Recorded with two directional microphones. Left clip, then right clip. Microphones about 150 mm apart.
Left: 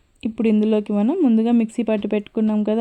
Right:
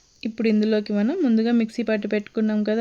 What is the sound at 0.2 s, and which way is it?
Speech, 25° left (ahead or behind).